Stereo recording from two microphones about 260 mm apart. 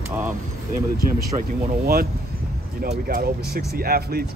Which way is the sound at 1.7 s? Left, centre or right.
Right.